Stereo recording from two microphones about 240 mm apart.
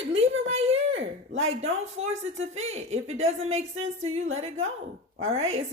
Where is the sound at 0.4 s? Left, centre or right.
Right.